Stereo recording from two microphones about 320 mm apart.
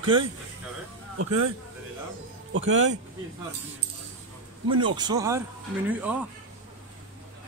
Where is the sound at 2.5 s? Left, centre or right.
Right.